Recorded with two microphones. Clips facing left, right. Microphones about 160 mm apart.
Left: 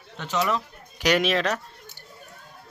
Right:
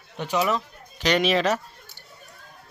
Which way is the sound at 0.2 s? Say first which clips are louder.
Right 2 dB; 10° right (ahead or behind).